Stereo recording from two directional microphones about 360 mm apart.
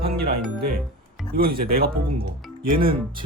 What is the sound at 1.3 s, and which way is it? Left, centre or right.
Speech, right.